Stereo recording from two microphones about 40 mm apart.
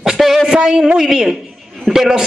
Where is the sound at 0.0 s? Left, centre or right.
Centre.